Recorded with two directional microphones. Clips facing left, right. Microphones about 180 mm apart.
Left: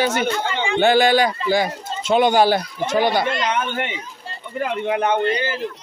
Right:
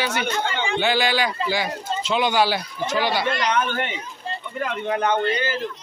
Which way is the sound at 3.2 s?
20° left (ahead or behind).